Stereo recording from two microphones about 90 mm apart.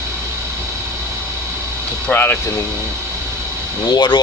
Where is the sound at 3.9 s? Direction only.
60° left (ahead or behind).